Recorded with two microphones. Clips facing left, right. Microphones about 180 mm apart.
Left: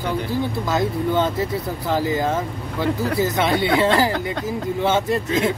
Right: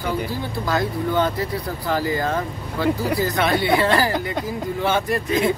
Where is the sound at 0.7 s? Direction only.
20° left (ahead or behind).